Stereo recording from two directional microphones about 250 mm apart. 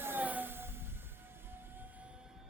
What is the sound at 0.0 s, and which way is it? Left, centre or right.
Music, centre.